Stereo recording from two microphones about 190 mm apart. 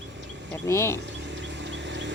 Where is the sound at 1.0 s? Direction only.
65° right (ahead or behind).